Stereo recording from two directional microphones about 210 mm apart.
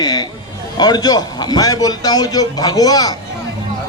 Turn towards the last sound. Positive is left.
turn(degrees=20)  # may be behind; listen again after turning